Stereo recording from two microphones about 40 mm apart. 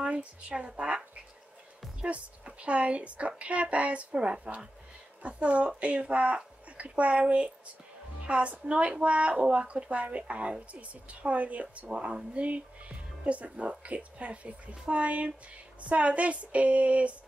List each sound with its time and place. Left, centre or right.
0.0 s a woman's voice: right